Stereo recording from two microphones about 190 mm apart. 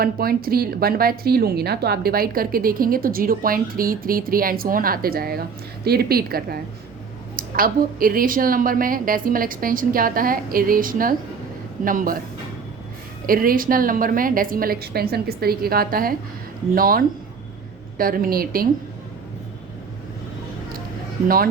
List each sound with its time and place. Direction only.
0.0 s speech: 50° right (ahead or behind)
13.2 s speech: 50° right (ahead or behind)
21.2 s speech: 50° right (ahead or behind)